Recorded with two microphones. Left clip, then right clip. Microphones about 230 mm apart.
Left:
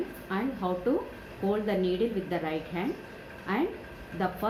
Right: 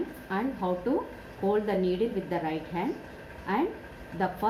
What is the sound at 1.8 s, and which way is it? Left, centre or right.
A woman's voice, right.